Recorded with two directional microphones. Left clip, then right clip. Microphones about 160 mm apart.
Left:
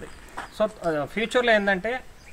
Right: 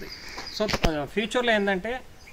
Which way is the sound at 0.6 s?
20° left (ahead or behind).